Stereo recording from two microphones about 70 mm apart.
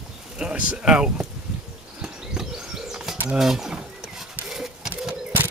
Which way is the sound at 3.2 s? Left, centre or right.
Centre.